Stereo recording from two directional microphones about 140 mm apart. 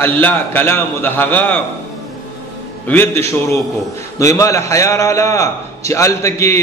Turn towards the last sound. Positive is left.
turn(degrees=20)  # may be behind; listen again after turning